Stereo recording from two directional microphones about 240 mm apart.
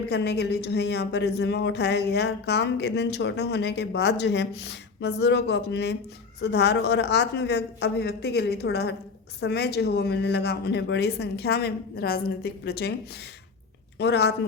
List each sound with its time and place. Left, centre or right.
0.1 s a woman's voice: left
14.0 s a woman's voice: left